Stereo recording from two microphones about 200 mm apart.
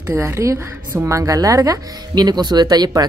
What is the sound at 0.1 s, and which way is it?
A woman's voice, 15° right (ahead or behind).